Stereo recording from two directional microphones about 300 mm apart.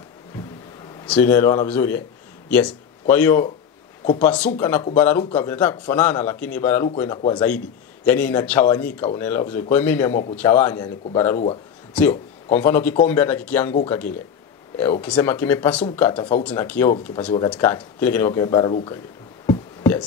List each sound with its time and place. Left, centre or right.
1.0 s a man's voice: centre
11.9 s speech: centre
16.1 s speech: centre
16.4 s speech: centre
19.4 s a sound: centre